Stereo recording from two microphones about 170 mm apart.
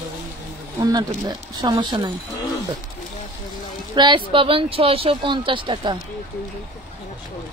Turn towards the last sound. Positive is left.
turn(degrees=-30)  # may be behind; listen again after turning